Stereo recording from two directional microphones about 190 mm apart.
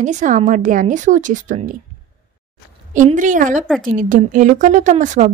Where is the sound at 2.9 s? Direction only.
40° right (ahead or behind).